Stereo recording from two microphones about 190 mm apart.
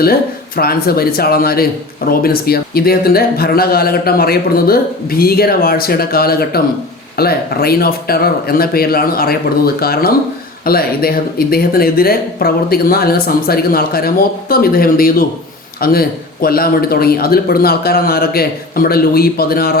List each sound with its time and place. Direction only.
0.0 s speech: 50° left (ahead or behind)